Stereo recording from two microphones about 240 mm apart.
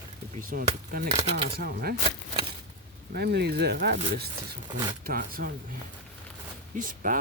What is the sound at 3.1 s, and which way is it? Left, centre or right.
Speech, right.